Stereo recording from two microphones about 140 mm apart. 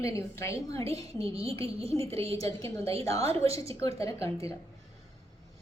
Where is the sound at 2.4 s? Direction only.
20° left (ahead or behind).